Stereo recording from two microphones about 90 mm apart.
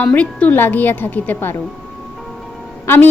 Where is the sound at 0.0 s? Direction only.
15° left (ahead or behind).